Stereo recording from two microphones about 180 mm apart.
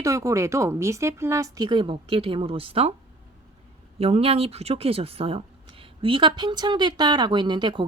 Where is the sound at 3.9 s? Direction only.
35° right (ahead or behind).